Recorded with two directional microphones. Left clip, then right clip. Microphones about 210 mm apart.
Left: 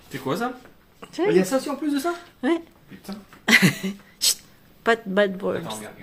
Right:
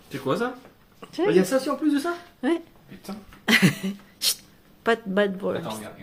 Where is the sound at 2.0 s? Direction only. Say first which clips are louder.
Left 2 dB; centre (ahead or behind).